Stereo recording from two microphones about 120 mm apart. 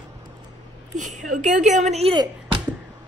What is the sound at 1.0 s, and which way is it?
A woman's voice, 90° right.